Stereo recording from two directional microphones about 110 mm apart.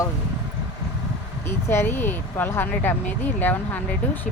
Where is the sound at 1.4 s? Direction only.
20° left (ahead or behind).